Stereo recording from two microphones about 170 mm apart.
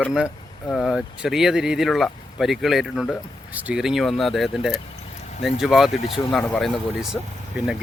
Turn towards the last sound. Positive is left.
turn(degrees=-5)  # may be behind; listen again after turning